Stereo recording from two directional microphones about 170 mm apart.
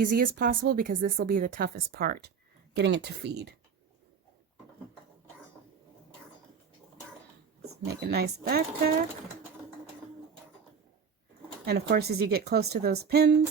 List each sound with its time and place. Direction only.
0.0 s speech: 55° right (ahead or behind)
2.7 s speech: 85° right
7.7 s a woman's voice: 70° right (ahead or behind)
11.6 s a woman's voice: 70° right (ahead or behind)